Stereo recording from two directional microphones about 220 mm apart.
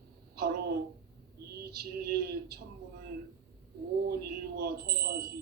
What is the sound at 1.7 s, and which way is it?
Speech, 45° right (ahead or behind).